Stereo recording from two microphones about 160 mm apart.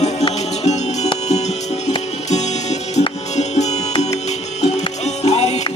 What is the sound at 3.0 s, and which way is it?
Music, 45° left (ahead or behind).